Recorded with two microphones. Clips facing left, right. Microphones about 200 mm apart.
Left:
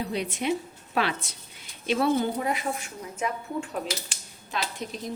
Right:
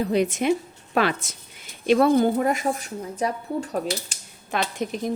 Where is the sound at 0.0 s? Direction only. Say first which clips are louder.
Right 7 dB; 45° right (ahead or behind).